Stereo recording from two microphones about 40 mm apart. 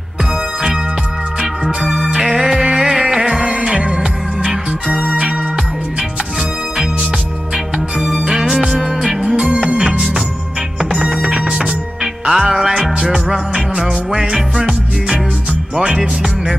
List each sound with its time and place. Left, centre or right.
1.8 s music: centre; by 5.3 s right
8.0 s music: centre
15.7 s music: centre